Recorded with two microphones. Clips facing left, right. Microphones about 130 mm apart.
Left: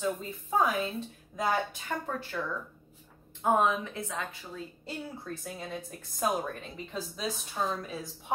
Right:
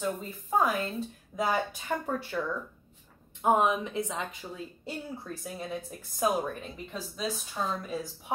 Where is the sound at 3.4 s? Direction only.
15° right (ahead or behind).